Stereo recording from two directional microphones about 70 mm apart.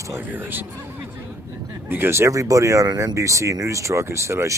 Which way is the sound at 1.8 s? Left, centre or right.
Right.